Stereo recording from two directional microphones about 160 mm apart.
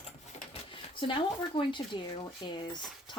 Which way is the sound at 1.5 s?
30° left (ahead or behind).